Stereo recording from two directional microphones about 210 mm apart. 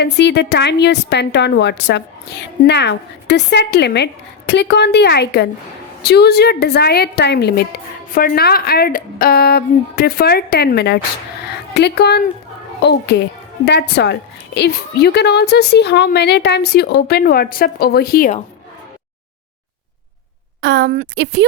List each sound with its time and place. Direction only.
0.0 s a woman's voice: 55° left (ahead or behind)
20.6 s a woman's voice: 55° right (ahead or behind)